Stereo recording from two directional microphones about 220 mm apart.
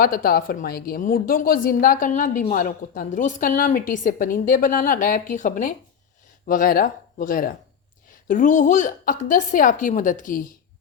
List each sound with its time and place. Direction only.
0.0 s a woman's voice: 40° left (ahead or behind)